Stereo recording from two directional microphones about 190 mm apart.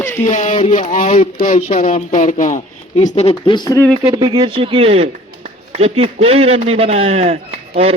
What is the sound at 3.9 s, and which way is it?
A man's voice, 25° right (ahead or behind).